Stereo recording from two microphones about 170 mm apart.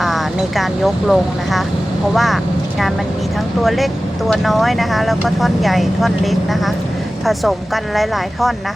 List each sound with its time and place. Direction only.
0.0 s speech: centre (ahead or behind)
3.6 s speech: centre (ahead or behind)
7.9 s speech: centre (ahead or behind)